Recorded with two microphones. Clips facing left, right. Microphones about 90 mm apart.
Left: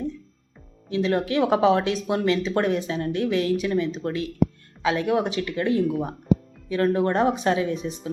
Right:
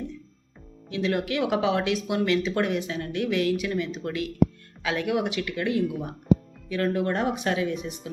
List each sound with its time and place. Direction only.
0.9 s speech: 30° left (ahead or behind)